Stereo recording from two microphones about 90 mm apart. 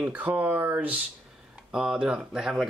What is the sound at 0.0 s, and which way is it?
Speech, 20° right (ahead or behind).